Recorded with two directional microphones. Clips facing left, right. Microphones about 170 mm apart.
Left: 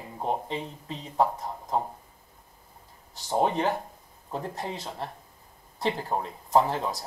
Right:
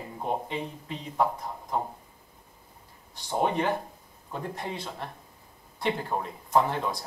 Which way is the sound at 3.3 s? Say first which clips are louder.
Left 1 dB; 35° left (ahead or behind).